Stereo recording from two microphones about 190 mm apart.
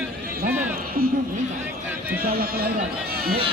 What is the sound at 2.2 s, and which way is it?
A man's voice, 50° right (ahead or behind).